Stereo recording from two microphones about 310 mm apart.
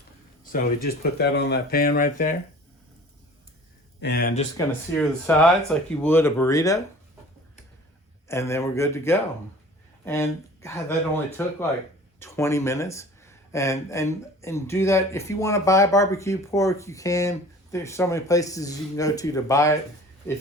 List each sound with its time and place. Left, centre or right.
0.5 s speech: left
4.0 s speech: left
4.6 s speech: centre
8.3 s speech: centre